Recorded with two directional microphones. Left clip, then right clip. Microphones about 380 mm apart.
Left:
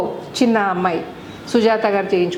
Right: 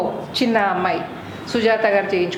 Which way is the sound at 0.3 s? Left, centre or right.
Left.